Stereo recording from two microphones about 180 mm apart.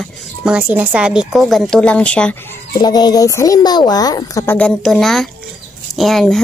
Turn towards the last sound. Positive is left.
turn(degrees=0)  # may be behind; listen again after turning